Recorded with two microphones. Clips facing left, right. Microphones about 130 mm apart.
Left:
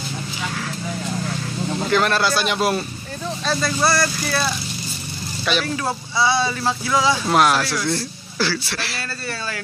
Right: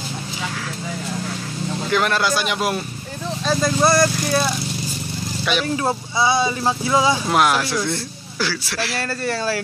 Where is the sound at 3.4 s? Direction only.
20° right (ahead or behind).